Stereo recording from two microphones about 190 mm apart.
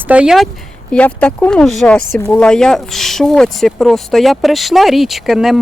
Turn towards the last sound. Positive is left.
turn(degrees=0)  # may be behind; listen again after turning